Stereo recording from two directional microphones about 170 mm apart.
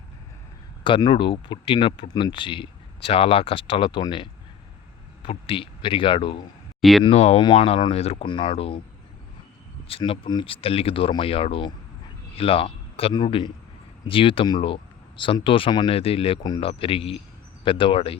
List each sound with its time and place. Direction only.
0.9 s speech: 30° left (ahead or behind)
9.9 s speech: 30° left (ahead or behind)